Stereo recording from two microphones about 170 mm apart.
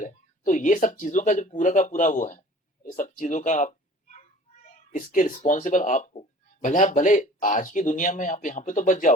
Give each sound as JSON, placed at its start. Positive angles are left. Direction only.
{"t": 0.0, "sound": "speech", "side_deg": 50}